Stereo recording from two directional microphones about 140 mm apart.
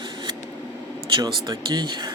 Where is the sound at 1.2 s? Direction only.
30° right (ahead or behind).